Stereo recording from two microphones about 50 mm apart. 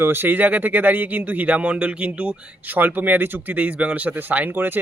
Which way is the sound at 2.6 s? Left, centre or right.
Right.